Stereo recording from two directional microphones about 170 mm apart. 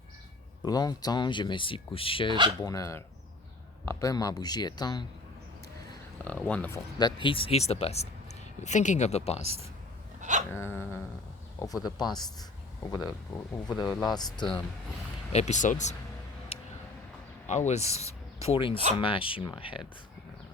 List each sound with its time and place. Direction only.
0.6 s speech: 25° left (ahead or behind)
2.6 s speech: 20° left (ahead or behind)
6.2 s speech: 10° left (ahead or behind)
7.0 s speech: 30° left (ahead or behind)
10.2 s dog: 45° right (ahead or behind)
10.5 s speech: 15° left (ahead or behind)
13.7 s speech: centre (ahead or behind)
14.0 s speech: 25° left (ahead or behind)
15.3 s speech: 40° left (ahead or behind)
17.4 s speech: 45° left (ahead or behind)